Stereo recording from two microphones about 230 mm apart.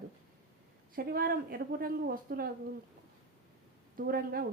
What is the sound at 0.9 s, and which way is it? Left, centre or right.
Speech, right.